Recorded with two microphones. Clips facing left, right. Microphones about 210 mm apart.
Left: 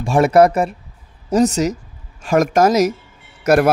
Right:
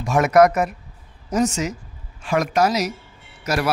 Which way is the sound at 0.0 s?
30° left (ahead or behind).